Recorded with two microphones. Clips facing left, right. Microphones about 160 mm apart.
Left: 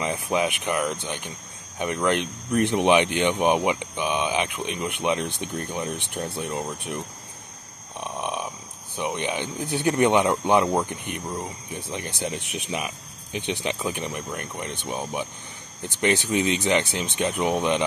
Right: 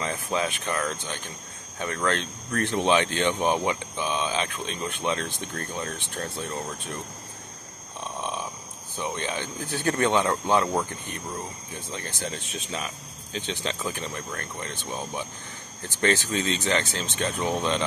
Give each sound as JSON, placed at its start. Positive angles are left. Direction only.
{"t": 0.0, "sound": "speech", "side_deg": 15}
{"t": 8.0, "sound": "a sound", "side_deg": 15}
{"t": 8.9, "sound": "speech", "side_deg": 15}